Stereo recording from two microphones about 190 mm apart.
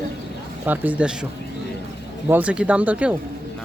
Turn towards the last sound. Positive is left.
turn(degrees=-5)  # may be behind; listen again after turning